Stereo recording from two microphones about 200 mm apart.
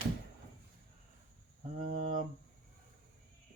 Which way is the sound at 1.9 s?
40° right (ahead or behind).